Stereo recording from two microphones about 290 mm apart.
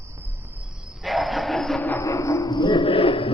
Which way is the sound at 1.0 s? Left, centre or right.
Centre.